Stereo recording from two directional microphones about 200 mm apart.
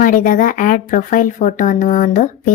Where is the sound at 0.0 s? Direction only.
40° left (ahead or behind).